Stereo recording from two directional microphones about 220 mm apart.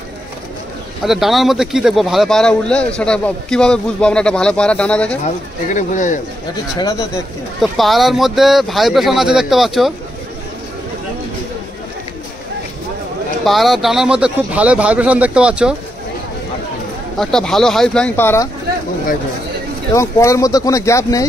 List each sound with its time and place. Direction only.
1.0 s speech: centre (ahead or behind)
5.2 s speech: 35° left (ahead or behind)
7.7 s speech: centre (ahead or behind)
13.4 s speech: centre (ahead or behind)
17.2 s speech: centre (ahead or behind)
19.9 s speech: 15° left (ahead or behind)